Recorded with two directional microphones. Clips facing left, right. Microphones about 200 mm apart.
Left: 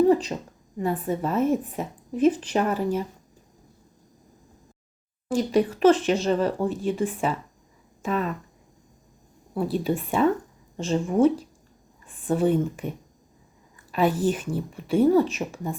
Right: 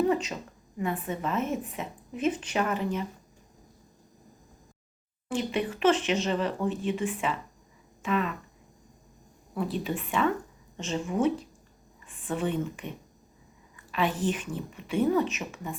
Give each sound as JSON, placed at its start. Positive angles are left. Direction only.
{"t": 0.1, "sound": "a sound", "side_deg": 35}
{"t": 0.8, "sound": "a woman's voice", "side_deg": 35}
{"t": 5.3, "sound": "a woman's voice", "side_deg": 40}
{"t": 9.7, "sound": "a woman's voice", "side_deg": 40}
{"t": 13.9, "sound": "a woman's voice", "side_deg": 40}